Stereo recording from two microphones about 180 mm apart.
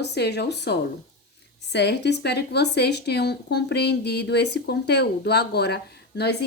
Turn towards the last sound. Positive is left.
turn(degrees=65)  # may be behind; listen again after turning